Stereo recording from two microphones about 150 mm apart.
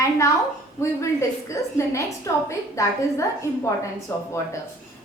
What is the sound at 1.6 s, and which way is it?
A woman's voice, 20° left (ahead or behind).